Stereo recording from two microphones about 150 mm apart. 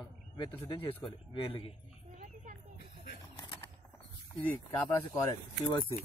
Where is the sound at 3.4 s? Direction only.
25° left (ahead or behind).